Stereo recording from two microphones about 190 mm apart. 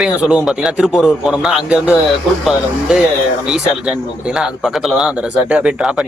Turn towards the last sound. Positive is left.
turn(degrees=-5)  # may be behind; listen again after turning